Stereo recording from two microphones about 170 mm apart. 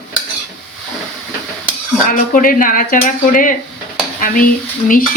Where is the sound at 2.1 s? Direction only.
55° left (ahead or behind).